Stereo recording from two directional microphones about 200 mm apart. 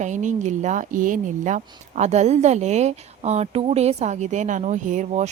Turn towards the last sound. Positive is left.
turn(degrees=-35)  # may be behind; listen again after turning